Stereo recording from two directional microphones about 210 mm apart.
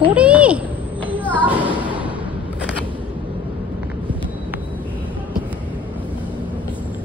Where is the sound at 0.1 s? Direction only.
5° right (ahead or behind).